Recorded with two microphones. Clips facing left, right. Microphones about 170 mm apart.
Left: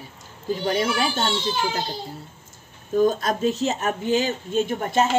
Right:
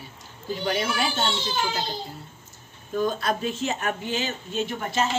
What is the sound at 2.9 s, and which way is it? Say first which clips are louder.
Speech: left 5 dB; 45° left (ahead or behind).